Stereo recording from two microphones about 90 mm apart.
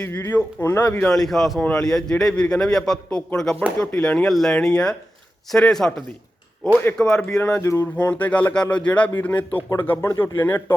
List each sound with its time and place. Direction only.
0.0 s speech: 20° left (ahead or behind)
1.1 s a man's voice: 5° left (ahead or behind)
7.0 s a man's voice: 10° left (ahead or behind)
7.6 s speech: 35° left (ahead or behind)
7.9 s a man's voice: 15° left (ahead or behind)